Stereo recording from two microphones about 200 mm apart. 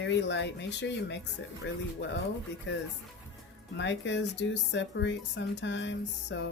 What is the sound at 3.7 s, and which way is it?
Speech, 65° left (ahead or behind).